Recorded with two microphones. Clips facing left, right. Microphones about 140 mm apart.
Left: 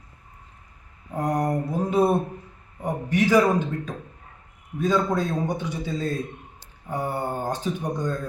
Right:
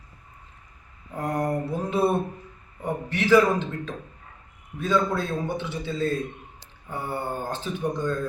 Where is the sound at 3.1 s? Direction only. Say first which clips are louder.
Even; 45° left (ahead or behind).